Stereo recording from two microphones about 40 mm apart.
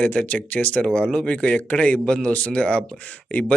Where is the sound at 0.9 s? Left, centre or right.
Left.